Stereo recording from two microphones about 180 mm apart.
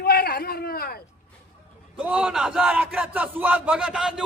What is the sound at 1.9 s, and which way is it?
A man's voice, 5° right (ahead or behind).